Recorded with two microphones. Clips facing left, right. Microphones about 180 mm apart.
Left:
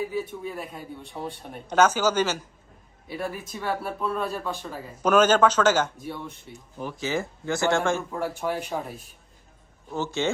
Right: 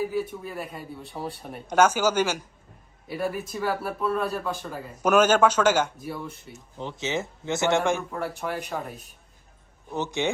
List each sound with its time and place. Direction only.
0.1 s speech: centre (ahead or behind)
6.7 s speech: 25° right (ahead or behind)
8.1 s speech: centre (ahead or behind)
9.9 s speech: 15° right (ahead or behind)